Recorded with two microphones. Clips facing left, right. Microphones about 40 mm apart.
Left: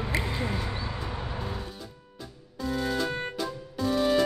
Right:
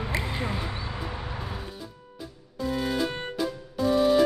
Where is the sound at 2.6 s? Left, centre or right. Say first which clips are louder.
Right 1 dB; centre.